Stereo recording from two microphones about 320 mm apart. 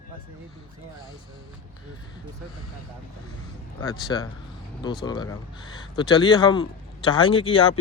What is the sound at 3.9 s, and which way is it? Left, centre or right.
Speech, centre.